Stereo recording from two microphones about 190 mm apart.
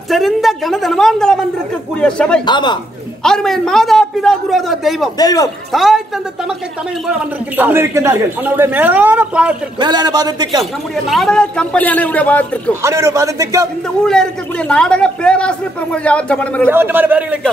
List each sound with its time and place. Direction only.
0.1 s speech: centre (ahead or behind)
2.4 s a man's voice: 25° left (ahead or behind)
3.3 s speech: 5° left (ahead or behind)
5.2 s a man's voice: 20° left (ahead or behind)
5.7 s speech: centre (ahead or behind)
7.1 s a man's voice: 5° right (ahead or behind)
9.8 s a man's voice: 20° right (ahead or behind)
10.6 s a man's voice: centre (ahead or behind)
12.8 s a man's voice: 15° right (ahead or behind)
14.7 s speech: 5° left (ahead or behind)
16.7 s a man's voice: 10° right (ahead or behind)